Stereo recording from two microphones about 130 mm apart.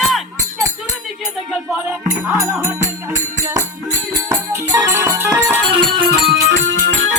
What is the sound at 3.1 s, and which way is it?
Music, 65° right (ahead or behind).